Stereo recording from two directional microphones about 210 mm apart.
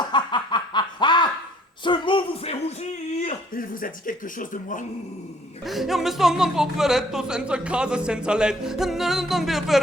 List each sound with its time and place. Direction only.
0.0 s snicker: 20° left (ahead or behind)
1.8 s music: 25° left (ahead or behind)
3.2 s speech: 40° left (ahead or behind)
5.6 s speech: centre (ahead or behind)